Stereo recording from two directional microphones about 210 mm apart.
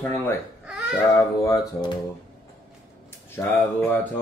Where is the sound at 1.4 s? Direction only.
15° left (ahead or behind).